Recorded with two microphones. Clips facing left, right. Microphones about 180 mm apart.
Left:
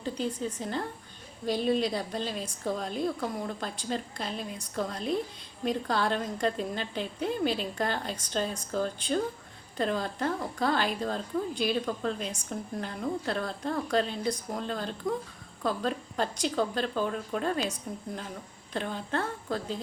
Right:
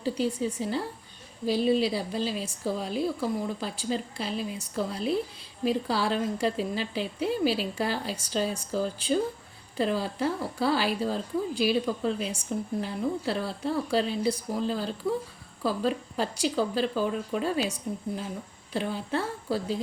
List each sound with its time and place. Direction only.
0.0 s a woman's voice: 10° right (ahead or behind)